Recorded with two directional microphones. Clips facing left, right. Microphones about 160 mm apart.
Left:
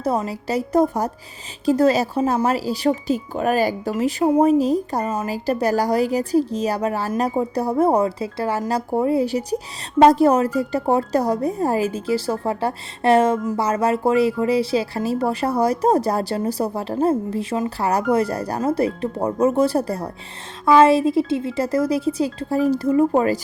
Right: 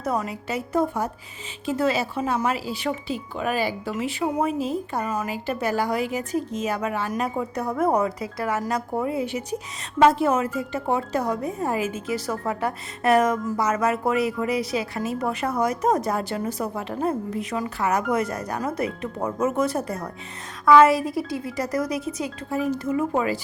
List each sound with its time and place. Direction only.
0.0 s speech: 30° left (ahead or behind)